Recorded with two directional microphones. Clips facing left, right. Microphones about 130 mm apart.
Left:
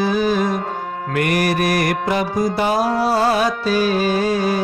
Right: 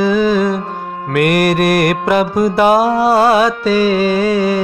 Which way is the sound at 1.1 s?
65° right (ahead or behind).